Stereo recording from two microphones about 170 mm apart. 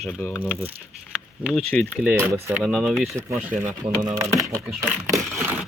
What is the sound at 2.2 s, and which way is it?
Speech, 15° right (ahead or behind).